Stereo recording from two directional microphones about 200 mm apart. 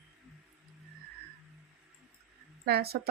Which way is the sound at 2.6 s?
50° right (ahead or behind).